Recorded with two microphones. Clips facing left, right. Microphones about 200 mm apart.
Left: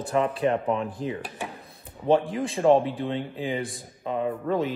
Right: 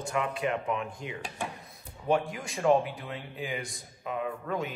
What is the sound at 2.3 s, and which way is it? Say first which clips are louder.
Speech: left 5 dB; 30° left (ahead or behind).